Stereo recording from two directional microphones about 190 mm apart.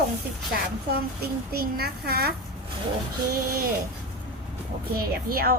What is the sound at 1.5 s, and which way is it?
Speech, 55° right (ahead or behind).